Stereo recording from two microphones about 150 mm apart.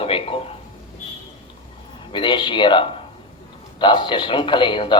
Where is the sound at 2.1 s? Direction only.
35° left (ahead or behind).